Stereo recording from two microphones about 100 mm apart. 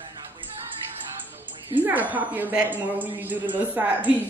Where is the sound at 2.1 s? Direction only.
15° right (ahead or behind).